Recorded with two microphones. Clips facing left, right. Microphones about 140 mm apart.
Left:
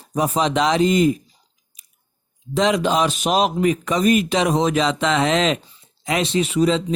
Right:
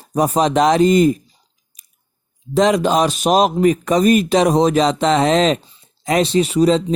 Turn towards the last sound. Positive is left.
turn(degrees=-40)  # may be behind; listen again after turning